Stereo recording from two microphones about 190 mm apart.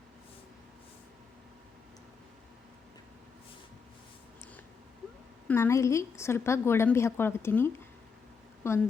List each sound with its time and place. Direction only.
5.5 s a woman's voice: 15° left (ahead or behind)